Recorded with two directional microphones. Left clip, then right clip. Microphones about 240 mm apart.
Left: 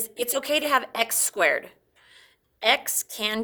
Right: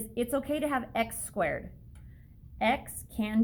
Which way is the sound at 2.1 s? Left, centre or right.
Left.